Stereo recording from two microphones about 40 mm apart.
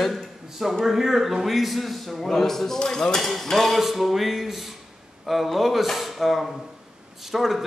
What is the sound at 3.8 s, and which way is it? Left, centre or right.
A man's voice, centre.